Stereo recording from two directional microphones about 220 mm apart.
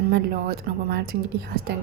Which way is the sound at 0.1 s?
45° right (ahead or behind).